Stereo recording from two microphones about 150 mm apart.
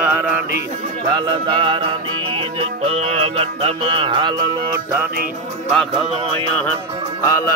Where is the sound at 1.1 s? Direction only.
30° right (ahead or behind).